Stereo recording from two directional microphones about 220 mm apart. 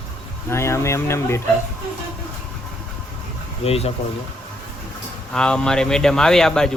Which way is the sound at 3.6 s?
25° left (ahead or behind).